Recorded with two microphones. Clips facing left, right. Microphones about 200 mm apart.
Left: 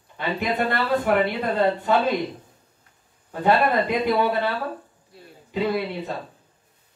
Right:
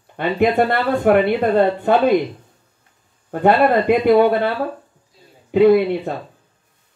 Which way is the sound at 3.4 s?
60° right (ahead or behind).